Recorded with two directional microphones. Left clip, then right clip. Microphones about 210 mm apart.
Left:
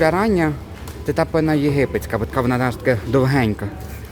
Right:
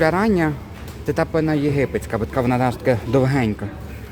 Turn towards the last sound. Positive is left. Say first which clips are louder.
# left 1 dB
turn(degrees=5)  # may be behind; listen again after turning